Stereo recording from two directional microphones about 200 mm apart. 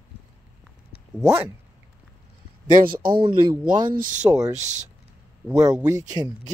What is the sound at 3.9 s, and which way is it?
Speech, 45° right (ahead or behind).